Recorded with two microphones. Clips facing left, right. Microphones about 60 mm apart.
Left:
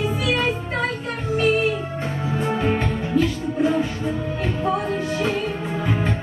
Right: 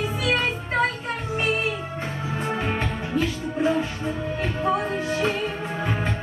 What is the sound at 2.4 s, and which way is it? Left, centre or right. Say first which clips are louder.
Music: left 4 dB; centre.